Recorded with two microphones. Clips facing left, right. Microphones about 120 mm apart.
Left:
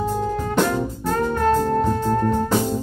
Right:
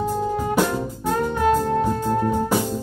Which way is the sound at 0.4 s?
10° right (ahead or behind).